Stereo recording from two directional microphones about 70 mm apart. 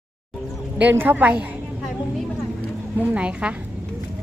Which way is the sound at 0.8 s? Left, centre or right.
Right.